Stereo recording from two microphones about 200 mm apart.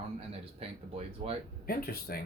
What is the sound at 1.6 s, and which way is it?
Speech, 50° left (ahead or behind).